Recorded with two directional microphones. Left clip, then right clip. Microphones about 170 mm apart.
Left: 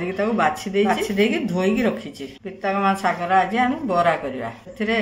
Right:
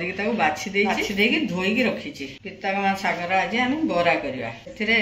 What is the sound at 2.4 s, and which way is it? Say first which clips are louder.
Speech: left 3 dB; 40° left (ahead or behind).